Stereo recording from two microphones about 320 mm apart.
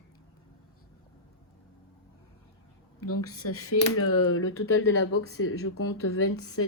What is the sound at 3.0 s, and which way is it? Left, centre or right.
Speech, left.